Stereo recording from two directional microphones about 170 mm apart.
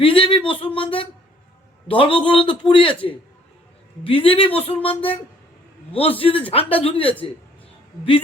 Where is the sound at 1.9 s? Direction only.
30° left (ahead or behind).